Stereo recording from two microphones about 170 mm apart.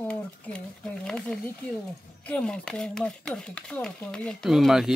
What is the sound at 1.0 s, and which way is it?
Speech, 5° left (ahead or behind).